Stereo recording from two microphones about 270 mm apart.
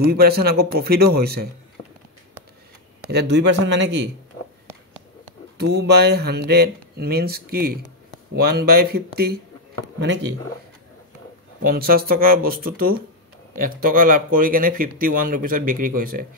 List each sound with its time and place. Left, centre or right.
0.0 s speech: right
3.1 s speech: right
5.6 s speech: right
11.6 s speech: right